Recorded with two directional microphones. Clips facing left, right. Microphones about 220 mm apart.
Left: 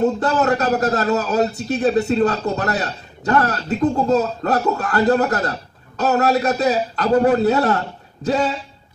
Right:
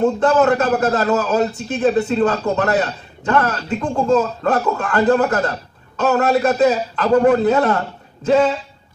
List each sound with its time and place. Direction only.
0.0 s speech: 40° left (ahead or behind)